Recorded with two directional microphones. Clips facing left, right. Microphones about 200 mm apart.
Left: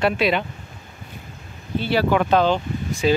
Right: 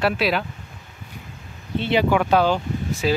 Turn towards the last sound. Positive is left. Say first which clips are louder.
# left 2 dB
turn(degrees=-5)  # may be behind; listen again after turning